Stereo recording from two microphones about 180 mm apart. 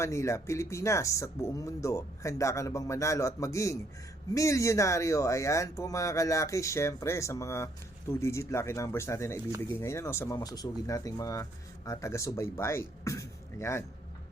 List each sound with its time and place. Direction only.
0.0 s speech: 15° left (ahead or behind)